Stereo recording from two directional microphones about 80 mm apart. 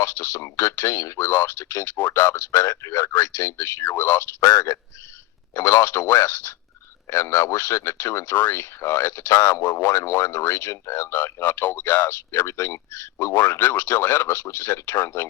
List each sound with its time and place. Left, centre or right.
0.0 s speech: left
4.4 s speech: left